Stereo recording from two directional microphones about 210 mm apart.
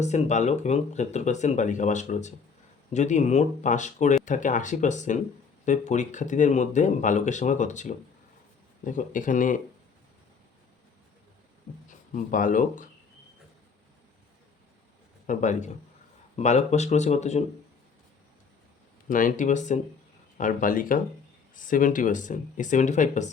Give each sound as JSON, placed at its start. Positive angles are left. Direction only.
{"t": 0.0, "sound": "speech", "side_deg": 35}
{"t": 11.9, "sound": "speech", "side_deg": 40}
{"t": 15.3, "sound": "speech", "side_deg": 35}
{"t": 19.0, "sound": "speech", "side_deg": 40}